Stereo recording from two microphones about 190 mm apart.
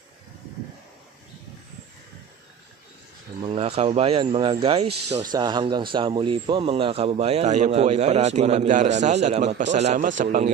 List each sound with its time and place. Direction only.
3.4 s a man's voice: 30° right (ahead or behind)
5.2 s a man's voice: 20° right (ahead or behind); by 10.5 s 40° right (ahead or behind)